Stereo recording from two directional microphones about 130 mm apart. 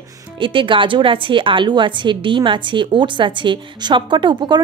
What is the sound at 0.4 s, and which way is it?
A woman's voice, 40° right (ahead or behind).